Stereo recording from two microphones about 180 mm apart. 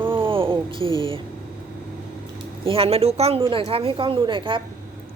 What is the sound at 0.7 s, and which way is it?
Speech, 30° right (ahead or behind).